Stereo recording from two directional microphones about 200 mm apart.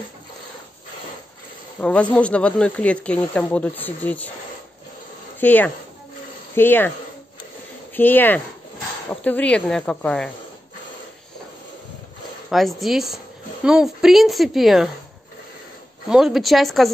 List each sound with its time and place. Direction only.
1.8 s speech: 5° left (ahead or behind)
5.4 s speech: 10° left (ahead or behind)
7.9 s speech: 10° left (ahead or behind)
12.4 s speech: centre (ahead or behind)
16.1 s speech: centre (ahead or behind)